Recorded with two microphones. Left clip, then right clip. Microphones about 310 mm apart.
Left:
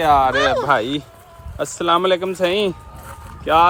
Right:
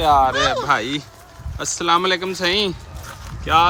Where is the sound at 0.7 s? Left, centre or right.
Centre.